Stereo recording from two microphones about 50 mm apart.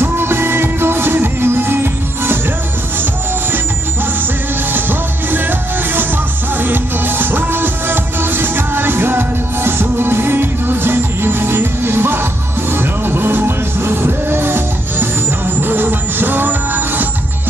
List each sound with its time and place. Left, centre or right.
0.0 s music: right
4.7 s music: right